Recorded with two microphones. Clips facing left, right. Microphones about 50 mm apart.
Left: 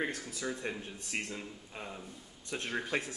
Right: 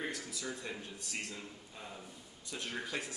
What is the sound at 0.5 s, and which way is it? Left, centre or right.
Speech, left.